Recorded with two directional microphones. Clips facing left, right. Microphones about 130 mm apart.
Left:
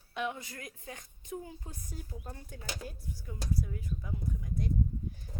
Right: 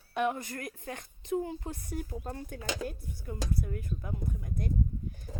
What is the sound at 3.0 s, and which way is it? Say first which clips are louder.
A woman's voice: right 5 dB; 55° right (ahead or behind).